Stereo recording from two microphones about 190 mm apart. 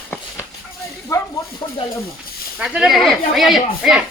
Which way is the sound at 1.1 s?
15° left (ahead or behind).